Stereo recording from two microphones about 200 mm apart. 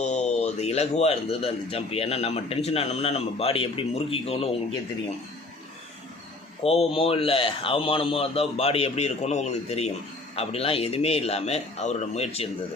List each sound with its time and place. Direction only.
0.0 s a man's voice: 35° left (ahead or behind)
6.6 s a man's voice: 30° left (ahead or behind)